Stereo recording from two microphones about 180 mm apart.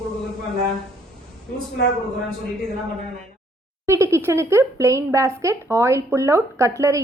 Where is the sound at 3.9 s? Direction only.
15° right (ahead or behind).